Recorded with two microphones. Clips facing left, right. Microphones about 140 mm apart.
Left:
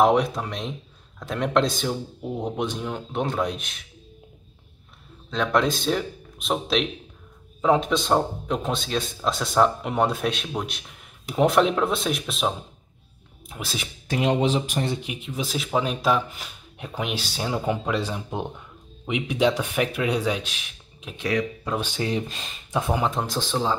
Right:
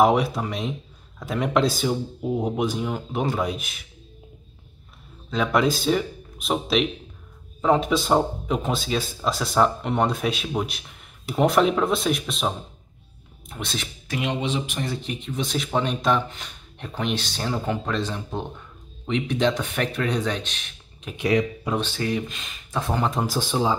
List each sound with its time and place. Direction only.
0.0 s speech: 5° right (ahead or behind)
5.3 s speech: 5° right (ahead or behind)
14.0 s speech: 35° left (ahead or behind)
15.0 s speech: 10° left (ahead or behind)
21.2 s speech: 20° right (ahead or behind)
21.7 s speech: 15° left (ahead or behind)
22.1 s speech: 30° left (ahead or behind)
22.7 s speech: 15° left (ahead or behind)
23.0 s speech: 5° right (ahead or behind)